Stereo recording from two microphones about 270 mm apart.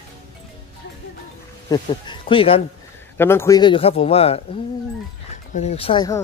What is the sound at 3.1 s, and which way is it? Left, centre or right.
A man's voice, centre.